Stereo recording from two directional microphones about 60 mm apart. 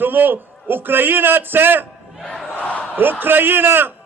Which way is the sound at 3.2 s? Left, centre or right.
Right.